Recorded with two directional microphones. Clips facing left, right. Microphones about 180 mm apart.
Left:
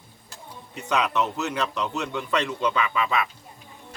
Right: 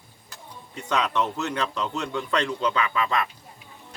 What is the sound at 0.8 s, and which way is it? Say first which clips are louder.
Speech: left 1 dB; 10° left (ahead or behind).